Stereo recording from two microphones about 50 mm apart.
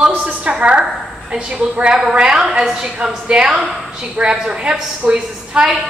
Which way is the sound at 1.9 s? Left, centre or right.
Centre.